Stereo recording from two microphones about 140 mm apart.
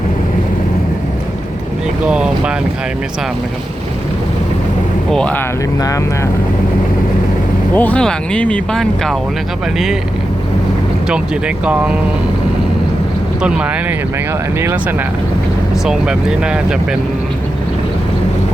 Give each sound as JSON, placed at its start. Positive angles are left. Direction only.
{"t": 2.0, "sound": "speech", "side_deg": -5}
{"t": 5.1, "sound": "speech", "side_deg": 10}
{"t": 7.8, "sound": "speech", "side_deg": 10}
{"t": 11.1, "sound": "speech", "side_deg": -10}
{"t": 13.4, "sound": "speech", "side_deg": -5}
{"t": 14.6, "sound": "speech", "side_deg": -20}
{"t": 15.9, "sound": "speech", "side_deg": -5}